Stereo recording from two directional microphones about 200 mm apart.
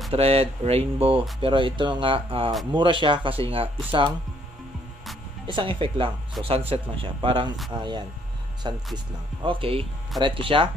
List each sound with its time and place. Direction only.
0.1 s speech: 30° right (ahead or behind)
5.5 s speech: 25° right (ahead or behind)